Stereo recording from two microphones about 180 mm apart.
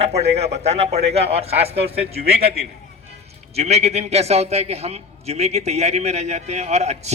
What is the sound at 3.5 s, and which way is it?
A man's voice, 35° right (ahead or behind).